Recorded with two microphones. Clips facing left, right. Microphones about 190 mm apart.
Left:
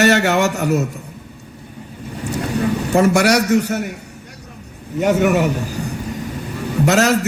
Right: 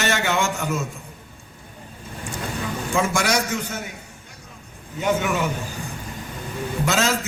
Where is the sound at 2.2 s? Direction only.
70° left (ahead or behind).